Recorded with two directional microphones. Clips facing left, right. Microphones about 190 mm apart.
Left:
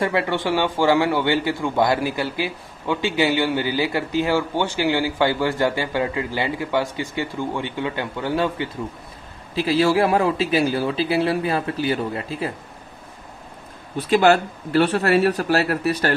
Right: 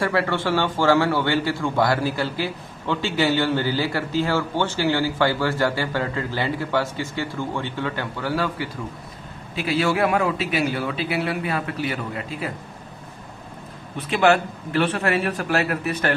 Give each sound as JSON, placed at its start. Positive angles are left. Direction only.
{"t": 0.0, "sound": "a man's voice", "side_deg": 20}
{"t": 9.6, "sound": "a man's voice", "side_deg": 35}
{"t": 13.9, "sound": "a man's voice", "side_deg": 40}